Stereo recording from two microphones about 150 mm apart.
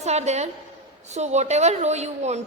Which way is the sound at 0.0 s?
50° right (ahead or behind).